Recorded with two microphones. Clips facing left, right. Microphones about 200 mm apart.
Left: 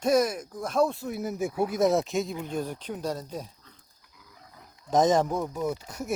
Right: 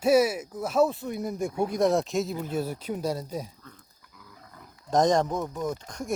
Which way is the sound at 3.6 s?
50° right (ahead or behind).